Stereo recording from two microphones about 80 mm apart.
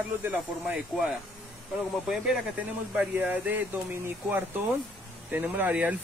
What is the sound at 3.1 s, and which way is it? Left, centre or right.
Speech, right.